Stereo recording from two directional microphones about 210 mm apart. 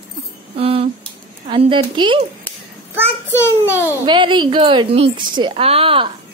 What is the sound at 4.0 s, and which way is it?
Child singing, 25° right (ahead or behind).